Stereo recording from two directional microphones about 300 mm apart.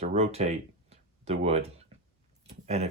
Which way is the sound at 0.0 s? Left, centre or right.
Right.